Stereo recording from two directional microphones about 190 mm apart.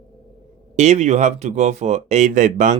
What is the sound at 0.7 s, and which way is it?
Speech, 35° right (ahead or behind).